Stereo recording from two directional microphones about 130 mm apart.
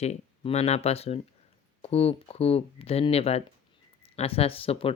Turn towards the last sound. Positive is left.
turn(degrees=45)  # may be behind; listen again after turning